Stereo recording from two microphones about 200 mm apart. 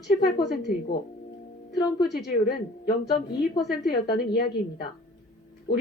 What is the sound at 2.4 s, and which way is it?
Speech, 50° left (ahead or behind).